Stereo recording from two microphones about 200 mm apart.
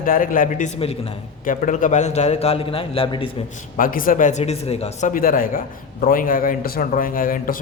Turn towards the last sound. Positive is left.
turn(degrees=45)  # may be behind; listen again after turning